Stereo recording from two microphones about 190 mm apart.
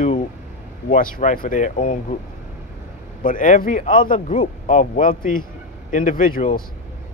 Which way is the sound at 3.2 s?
45° left (ahead or behind).